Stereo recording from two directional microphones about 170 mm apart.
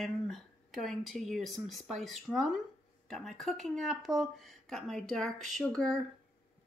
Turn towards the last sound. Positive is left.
turn(degrees=0)  # may be behind; listen again after turning